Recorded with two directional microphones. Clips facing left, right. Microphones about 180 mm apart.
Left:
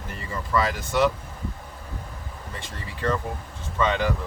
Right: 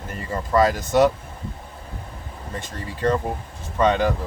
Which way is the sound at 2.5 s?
45° right (ahead or behind).